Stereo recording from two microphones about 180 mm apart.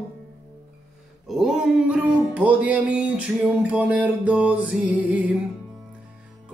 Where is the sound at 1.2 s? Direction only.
5° right (ahead or behind).